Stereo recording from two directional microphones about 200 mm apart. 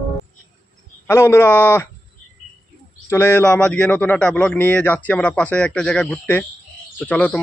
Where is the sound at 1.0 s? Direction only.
10° left (ahead or behind).